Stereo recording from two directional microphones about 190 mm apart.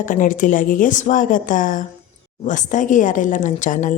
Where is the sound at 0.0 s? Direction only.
45° left (ahead or behind).